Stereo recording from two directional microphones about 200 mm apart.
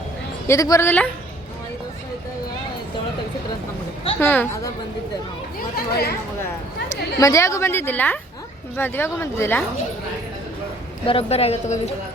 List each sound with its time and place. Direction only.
0.4 s a woman's voice: 15° left (ahead or behind)
4.2 s a woman's voice: 10° left (ahead or behind)
5.7 s speech: 50° left (ahead or behind)
7.2 s a woman's voice: 15° left (ahead or behind)
11.0 s speech: 30° left (ahead or behind)